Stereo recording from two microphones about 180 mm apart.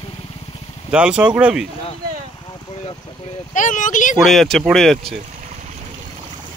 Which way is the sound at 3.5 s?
45° left (ahead or behind).